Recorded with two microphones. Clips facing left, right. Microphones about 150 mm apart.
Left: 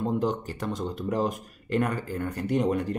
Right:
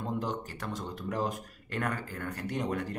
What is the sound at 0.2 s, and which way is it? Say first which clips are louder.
Speech: left 7 dB; 20° left (ahead or behind).